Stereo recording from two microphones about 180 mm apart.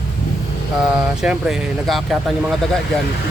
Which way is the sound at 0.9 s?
5° right (ahead or behind).